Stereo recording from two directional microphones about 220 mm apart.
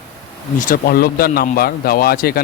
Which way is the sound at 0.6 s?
40° left (ahead or behind).